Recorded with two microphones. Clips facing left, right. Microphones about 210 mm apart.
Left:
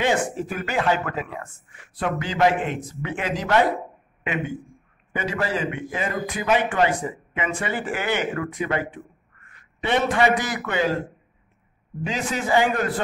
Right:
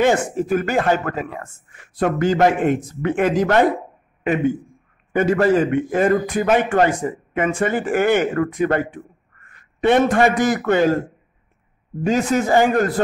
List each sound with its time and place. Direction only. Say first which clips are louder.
0.0 s a man's voice: right 5 dB; 45° right (ahead or behind)
5.1 s a man's voice: right 10 dB; 50° right (ahead or behind)
12.0 s a man's voice: right 9 dB; 45° right (ahead or behind)